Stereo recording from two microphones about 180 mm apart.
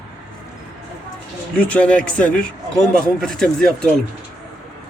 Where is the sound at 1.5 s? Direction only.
5° left (ahead or behind).